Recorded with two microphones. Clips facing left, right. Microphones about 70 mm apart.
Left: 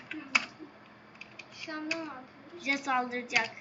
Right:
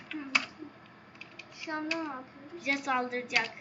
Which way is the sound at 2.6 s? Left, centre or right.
Centre.